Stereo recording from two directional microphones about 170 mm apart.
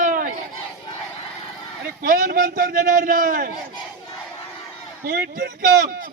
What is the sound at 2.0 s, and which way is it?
A man's voice, 55° right (ahead or behind).